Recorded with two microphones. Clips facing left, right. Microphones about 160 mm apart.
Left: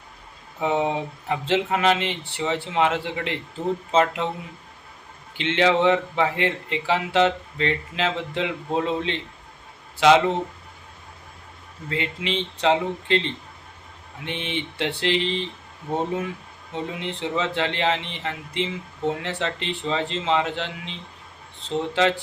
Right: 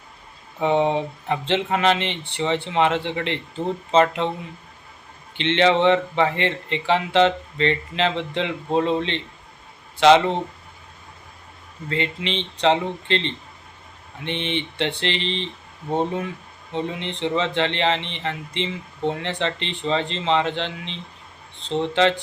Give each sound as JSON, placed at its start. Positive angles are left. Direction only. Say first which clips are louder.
{"t": 0.6, "sound": "speech", "louder": "right 3 dB", "side_deg": 5}
{"t": 5.4, "sound": "speech", "louder": "right 2 dB", "side_deg": 5}
{"t": 11.9, "sound": "speech", "louder": "right 2 dB", "side_deg": 5}
{"t": 16.7, "sound": "speech", "louder": "right 2 dB", "side_deg": 5}